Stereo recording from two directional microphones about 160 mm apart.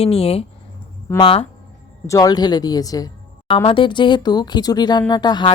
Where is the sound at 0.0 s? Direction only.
40° left (ahead or behind).